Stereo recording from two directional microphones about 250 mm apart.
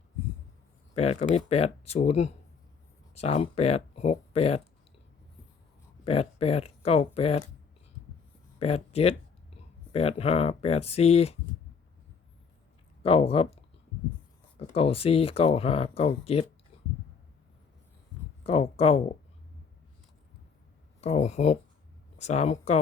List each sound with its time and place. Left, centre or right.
0.9 s speech: left
6.1 s speech: left
8.5 s speech: left
13.0 s speech: left
14.7 s speech: left
18.4 s speech: left
21.0 s speech: left